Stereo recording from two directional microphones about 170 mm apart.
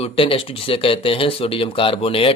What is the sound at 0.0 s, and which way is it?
A man's voice, 35° left (ahead or behind).